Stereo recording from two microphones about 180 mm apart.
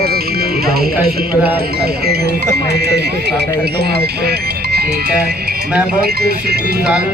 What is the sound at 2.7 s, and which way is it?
Speech, 65° right (ahead or behind).